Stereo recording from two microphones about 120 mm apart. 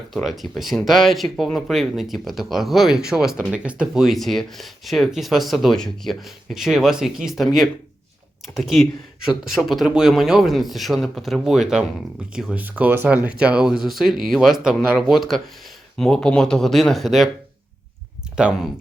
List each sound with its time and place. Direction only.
0.1 s speech: centre (ahead or behind)
18.3 s speech: 5° right (ahead or behind)